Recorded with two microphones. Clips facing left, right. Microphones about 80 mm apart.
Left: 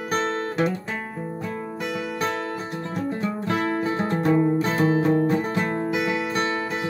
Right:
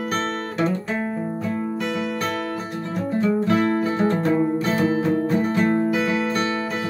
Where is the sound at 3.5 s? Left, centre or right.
Centre.